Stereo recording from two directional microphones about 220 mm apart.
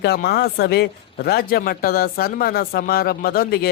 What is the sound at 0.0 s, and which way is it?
Speech, 45° left (ahead or behind).